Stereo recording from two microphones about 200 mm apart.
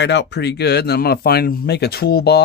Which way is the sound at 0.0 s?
60° left (ahead or behind).